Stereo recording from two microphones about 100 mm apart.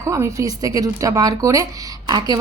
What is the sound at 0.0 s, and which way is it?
A woman's voice, 30° right (ahead or behind).